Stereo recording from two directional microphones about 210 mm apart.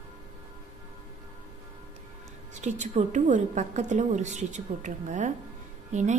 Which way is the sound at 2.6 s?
35° right (ahead or behind).